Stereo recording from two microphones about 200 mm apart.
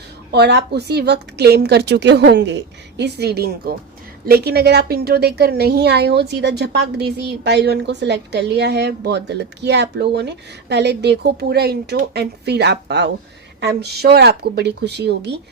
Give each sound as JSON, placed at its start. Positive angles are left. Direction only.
{"t": 0.3, "sound": "a woman's voice", "side_deg": -55}